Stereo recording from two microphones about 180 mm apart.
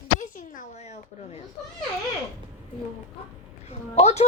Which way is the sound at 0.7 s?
40° left (ahead or behind).